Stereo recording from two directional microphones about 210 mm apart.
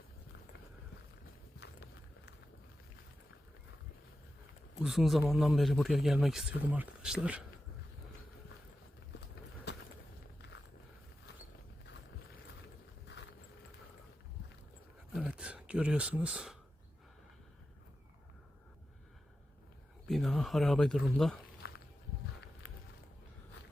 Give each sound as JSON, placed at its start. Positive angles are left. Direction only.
{"t": 1.5, "sound": "horse", "side_deg": 55}
{"t": 4.8, "sound": "speech", "side_deg": 0}
{"t": 10.4, "sound": "walk", "side_deg": 55}
{"t": 15.1, "sound": "a sound", "side_deg": -5}
{"t": 20.1, "sound": "speech", "side_deg": 0}
{"t": 21.6, "sound": "walk", "side_deg": 50}